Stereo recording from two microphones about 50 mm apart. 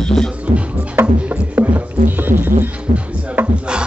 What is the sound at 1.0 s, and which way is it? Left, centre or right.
Speech, right.